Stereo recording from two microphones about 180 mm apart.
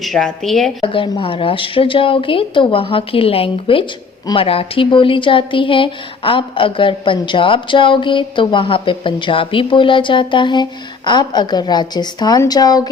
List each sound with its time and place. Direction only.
0.0 s a woman's voice: centre (ahead or behind)
0.8 s a woman's voice: 30° left (ahead or behind)